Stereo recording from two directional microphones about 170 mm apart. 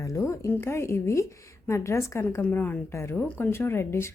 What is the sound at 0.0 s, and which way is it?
A woman's voice, 20° left (ahead or behind).